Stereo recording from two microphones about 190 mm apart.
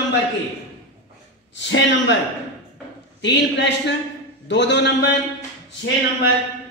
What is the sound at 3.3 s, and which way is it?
A woman's voice, 65° left (ahead or behind).